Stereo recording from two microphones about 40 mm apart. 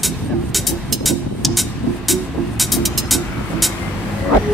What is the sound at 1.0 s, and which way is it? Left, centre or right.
Vehicle, centre.